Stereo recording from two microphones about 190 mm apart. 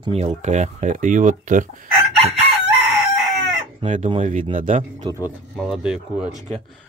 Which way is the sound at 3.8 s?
35° right (ahead or behind).